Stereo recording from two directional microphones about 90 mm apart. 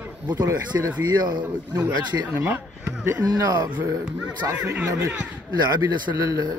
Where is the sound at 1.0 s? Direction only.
50° right (ahead or behind).